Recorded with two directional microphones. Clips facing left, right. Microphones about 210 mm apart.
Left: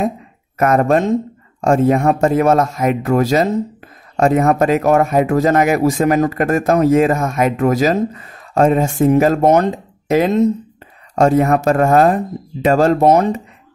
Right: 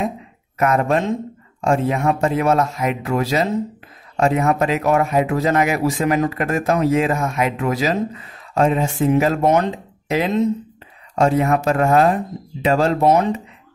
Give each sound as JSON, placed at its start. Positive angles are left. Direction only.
{"t": 0.6, "sound": "speech", "side_deg": 45}